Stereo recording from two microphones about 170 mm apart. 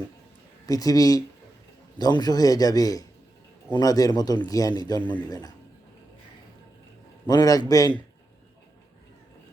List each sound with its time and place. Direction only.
0.7 s a man's voice: 20° left (ahead or behind)
7.3 s a man's voice: 20° left (ahead or behind)